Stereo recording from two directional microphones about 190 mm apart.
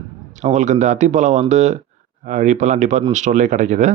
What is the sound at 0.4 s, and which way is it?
A man's voice, 40° right (ahead or behind).